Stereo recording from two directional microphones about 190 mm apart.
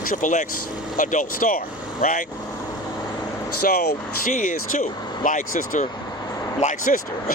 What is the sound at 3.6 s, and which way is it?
Speech, 50° left (ahead or behind).